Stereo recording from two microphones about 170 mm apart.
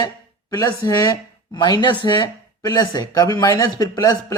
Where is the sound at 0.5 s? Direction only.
20° left (ahead or behind).